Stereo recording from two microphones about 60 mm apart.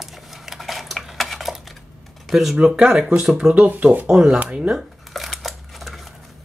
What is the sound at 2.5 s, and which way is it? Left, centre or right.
Speech, centre.